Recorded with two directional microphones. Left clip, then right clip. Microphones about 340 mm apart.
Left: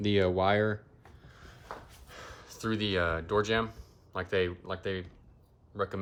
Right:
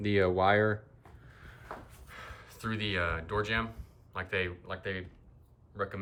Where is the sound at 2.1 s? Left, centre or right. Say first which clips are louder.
Even; centre.